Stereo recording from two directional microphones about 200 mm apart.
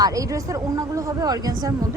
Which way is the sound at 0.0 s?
15° right (ahead or behind).